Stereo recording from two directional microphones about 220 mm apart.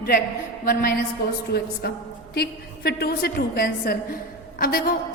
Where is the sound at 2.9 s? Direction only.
45° left (ahead or behind).